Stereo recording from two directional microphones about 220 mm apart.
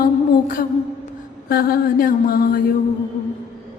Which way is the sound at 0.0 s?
40° left (ahead or behind).